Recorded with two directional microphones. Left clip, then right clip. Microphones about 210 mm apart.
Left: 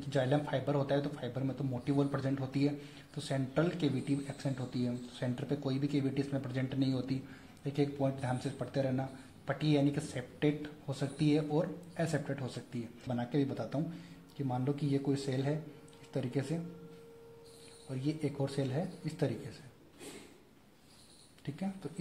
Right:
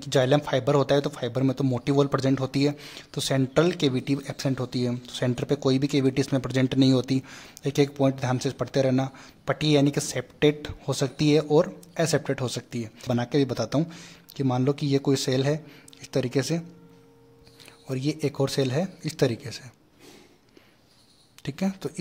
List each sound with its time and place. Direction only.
0.0 s speech: 40° right (ahead or behind)
17.8 s speech: 35° right (ahead or behind)
21.4 s speech: 40° right (ahead or behind)